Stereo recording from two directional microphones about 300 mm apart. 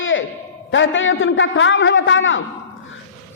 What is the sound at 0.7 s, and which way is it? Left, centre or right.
A man's voice, left.